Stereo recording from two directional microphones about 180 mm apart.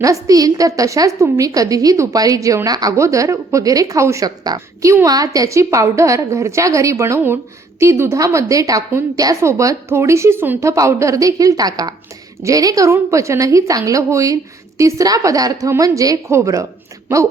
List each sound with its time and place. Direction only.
0.0 s a woman's voice: 20° right (ahead or behind)